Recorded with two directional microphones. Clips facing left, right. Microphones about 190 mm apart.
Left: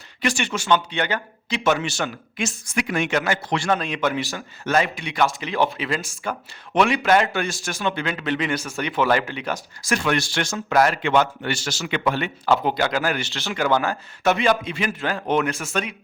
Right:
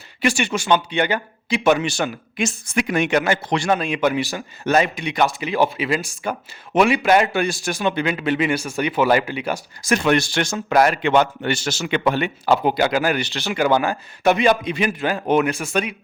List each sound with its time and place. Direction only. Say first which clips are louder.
0.2 s a man's voice: right 4 dB; 10° right (ahead or behind)
9.9 s a man's voice: right 4 dB; 20° right (ahead or behind)